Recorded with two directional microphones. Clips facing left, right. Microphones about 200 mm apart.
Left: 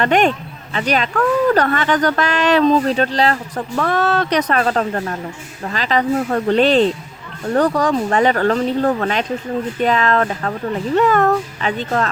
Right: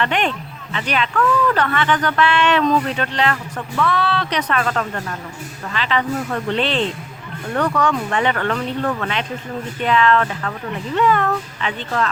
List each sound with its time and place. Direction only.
0.0 s speech: 45° left (ahead or behind)
3.8 s speech: 45° left (ahead or behind)